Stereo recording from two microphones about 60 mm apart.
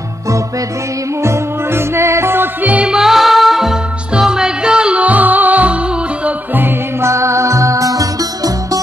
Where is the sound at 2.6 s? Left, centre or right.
Right.